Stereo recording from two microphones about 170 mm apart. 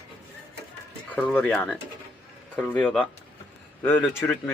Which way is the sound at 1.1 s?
10° left (ahead or behind).